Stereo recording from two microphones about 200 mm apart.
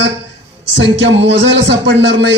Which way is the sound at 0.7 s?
65° right (ahead or behind).